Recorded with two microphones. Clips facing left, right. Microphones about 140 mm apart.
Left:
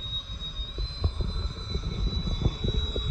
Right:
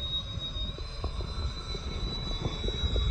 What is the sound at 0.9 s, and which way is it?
Vehicle, 10° right (ahead or behind).